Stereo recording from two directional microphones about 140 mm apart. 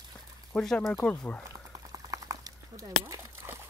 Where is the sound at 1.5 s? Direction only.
25° right (ahead or behind).